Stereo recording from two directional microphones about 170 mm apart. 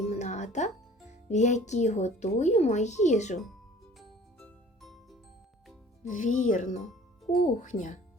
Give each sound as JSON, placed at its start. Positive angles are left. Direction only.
{"t": 0.0, "sound": "music", "side_deg": 40}
{"t": 1.3, "sound": "speech", "side_deg": 45}
{"t": 4.4, "sound": "music", "side_deg": 5}
{"t": 6.0, "sound": "speech", "side_deg": 45}